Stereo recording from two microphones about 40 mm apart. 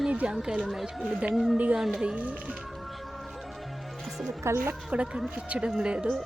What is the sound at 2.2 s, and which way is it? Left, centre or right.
Speech, right.